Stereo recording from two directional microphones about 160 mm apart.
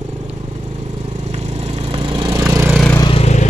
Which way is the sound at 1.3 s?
45° right (ahead or behind).